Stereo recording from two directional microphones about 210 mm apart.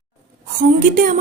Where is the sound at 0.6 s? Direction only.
40° right (ahead or behind).